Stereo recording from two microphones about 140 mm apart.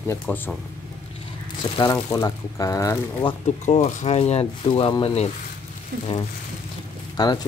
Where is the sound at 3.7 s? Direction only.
50° left (ahead or behind).